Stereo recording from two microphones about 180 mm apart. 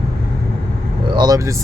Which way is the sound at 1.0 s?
25° right (ahead or behind).